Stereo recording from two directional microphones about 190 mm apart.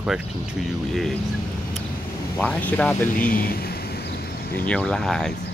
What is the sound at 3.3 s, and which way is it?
Vehicle, 50° left (ahead or behind).